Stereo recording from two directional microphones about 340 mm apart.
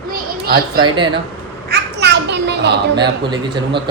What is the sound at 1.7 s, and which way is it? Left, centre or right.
Children playing, right.